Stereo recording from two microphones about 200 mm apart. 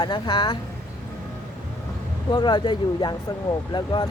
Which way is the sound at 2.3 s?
20° left (ahead or behind).